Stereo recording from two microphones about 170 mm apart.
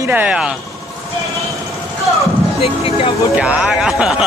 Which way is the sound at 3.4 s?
5° right (ahead or behind).